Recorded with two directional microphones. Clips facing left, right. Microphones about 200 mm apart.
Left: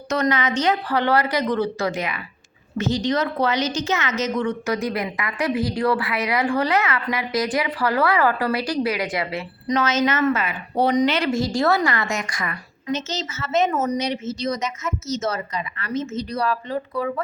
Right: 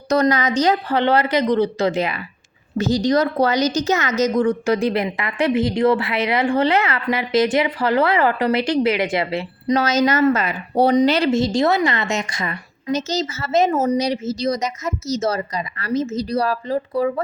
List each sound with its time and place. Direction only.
0.1 s speech: 35° right (ahead or behind)
0.9 s a woman's voice: 25° right (ahead or behind)
12.9 s speech: 35° right (ahead or behind)